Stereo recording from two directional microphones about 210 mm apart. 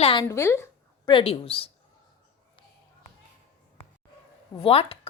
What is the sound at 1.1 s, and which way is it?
Speech, 25° left (ahead or behind).